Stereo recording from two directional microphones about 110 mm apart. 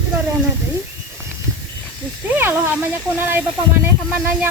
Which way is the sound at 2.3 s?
20° right (ahead or behind).